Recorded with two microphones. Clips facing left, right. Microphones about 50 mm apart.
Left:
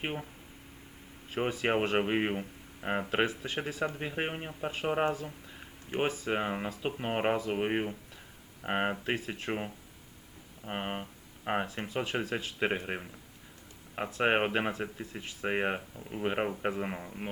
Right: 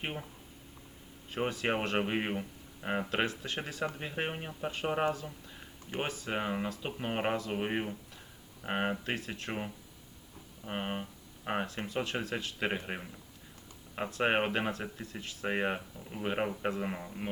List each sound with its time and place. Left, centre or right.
0.0 s speech: centre
1.3 s speech: centre
14.4 s speech: left
14.7 s speech: centre